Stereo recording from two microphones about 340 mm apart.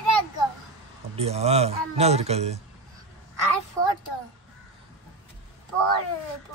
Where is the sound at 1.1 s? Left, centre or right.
Centre.